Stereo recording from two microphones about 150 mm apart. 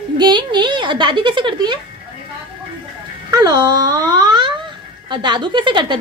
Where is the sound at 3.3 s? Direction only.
25° right (ahead or behind).